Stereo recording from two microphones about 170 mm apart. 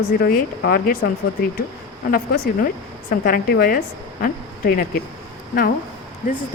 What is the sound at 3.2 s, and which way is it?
A woman's voice, 65° left (ahead or behind).